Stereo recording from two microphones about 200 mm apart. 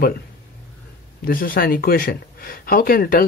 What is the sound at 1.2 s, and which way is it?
Speech, 45° left (ahead or behind).